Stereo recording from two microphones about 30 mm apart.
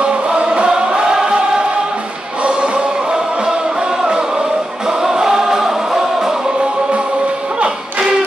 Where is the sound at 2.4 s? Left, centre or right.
Right.